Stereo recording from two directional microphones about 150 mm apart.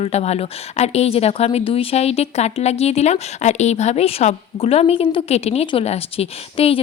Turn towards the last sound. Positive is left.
turn(degrees=40)  # may be behind; listen again after turning